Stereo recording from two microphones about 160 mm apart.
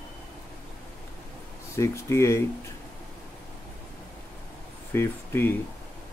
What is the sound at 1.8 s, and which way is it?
Speech, 15° left (ahead or behind).